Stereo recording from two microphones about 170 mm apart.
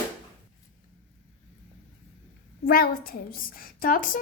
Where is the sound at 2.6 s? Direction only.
60° left (ahead or behind).